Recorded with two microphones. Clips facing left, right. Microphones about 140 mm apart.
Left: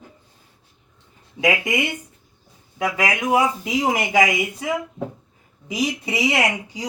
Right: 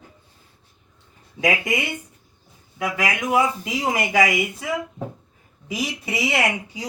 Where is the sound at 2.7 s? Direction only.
25° left (ahead or behind).